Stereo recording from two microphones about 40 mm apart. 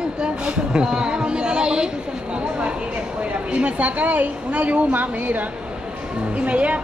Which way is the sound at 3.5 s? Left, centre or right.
Right.